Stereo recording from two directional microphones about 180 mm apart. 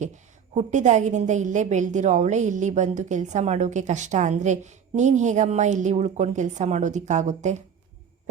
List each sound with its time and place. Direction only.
0.5 s a woman's voice: 40° right (ahead or behind)